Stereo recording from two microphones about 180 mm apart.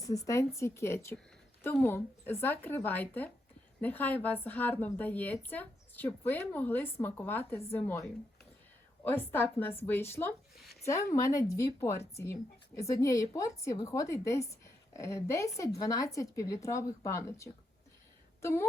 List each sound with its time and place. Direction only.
0.0 s a woman's voice: 20° left (ahead or behind)
9.0 s a woman's voice: 10° left (ahead or behind)